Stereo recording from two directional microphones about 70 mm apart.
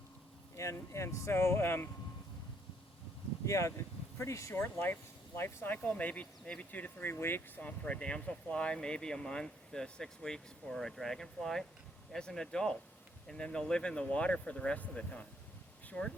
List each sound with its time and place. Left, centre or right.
0.5 s speech: left
3.4 s speech: left
4.5 s speech: left